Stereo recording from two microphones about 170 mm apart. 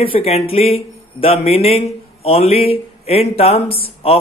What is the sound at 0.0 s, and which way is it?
A man's voice, 35° left (ahead or behind).